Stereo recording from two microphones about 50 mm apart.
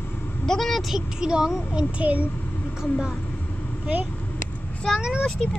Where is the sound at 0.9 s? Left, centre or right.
Centre.